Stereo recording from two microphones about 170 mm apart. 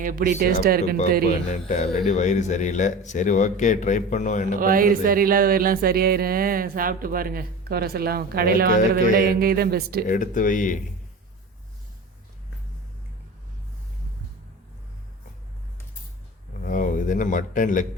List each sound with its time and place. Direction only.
0.0 s speech: 55° right (ahead or behind)
1.6 s speech: 45° left (ahead or behind)
4.6 s speech: 55° right (ahead or behind)
10.1 s speech: 50° left (ahead or behind)
16.6 s speech: 50° left (ahead or behind)